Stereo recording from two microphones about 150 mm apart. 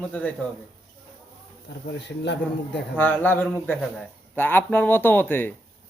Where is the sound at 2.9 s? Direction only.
10° left (ahead or behind).